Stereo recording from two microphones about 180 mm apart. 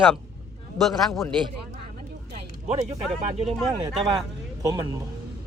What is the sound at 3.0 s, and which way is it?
Speech, centre (ahead or behind).